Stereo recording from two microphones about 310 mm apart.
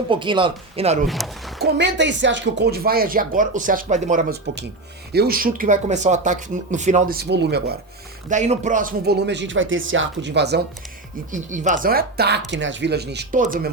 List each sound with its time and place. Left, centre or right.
0.1 s speech: centre
1.0 s speech: centre
1.6 s speech: right